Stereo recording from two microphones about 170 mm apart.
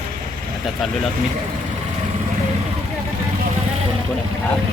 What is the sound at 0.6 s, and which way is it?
Speech, centre (ahead or behind).